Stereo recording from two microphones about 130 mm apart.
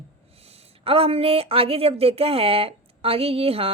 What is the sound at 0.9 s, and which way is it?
Speech, 45° right (ahead or behind).